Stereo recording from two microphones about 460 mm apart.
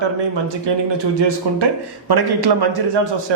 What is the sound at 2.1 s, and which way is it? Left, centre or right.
Speech, right.